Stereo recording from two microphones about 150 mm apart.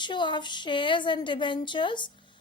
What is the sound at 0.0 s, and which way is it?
A woman's voice, 30° left (ahead or behind).